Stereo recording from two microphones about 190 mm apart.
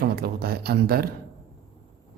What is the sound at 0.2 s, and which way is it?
Speech, 55° right (ahead or behind).